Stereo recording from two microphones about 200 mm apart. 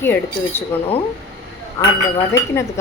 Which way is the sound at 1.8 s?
15° left (ahead or behind).